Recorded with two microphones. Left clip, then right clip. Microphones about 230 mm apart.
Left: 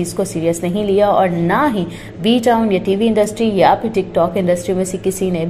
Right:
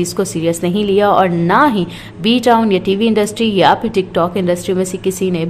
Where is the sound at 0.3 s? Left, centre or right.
Centre.